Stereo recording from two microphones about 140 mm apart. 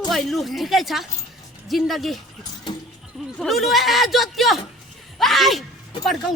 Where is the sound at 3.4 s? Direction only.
Centre (ahead or behind).